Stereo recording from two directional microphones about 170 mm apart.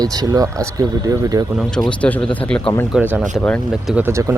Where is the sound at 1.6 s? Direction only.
5° left (ahead or behind).